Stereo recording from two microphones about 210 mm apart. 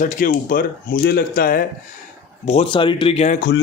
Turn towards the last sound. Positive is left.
turn(degrees=50)  # may be behind; listen again after turning